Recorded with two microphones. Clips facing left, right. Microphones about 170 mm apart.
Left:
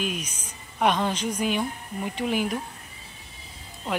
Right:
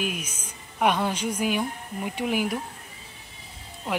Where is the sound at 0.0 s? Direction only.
10° right (ahead or behind).